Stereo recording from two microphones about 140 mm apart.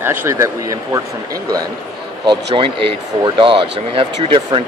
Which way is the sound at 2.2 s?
35° right (ahead or behind).